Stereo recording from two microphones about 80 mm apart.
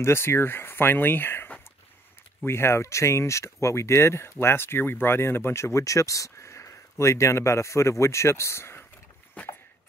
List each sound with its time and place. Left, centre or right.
0.0 s speech: left